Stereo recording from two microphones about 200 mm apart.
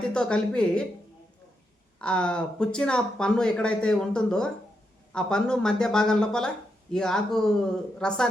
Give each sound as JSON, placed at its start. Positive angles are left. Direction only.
{"t": 0.0, "sound": "speech", "side_deg": 5}
{"t": 2.0, "sound": "speech", "side_deg": 5}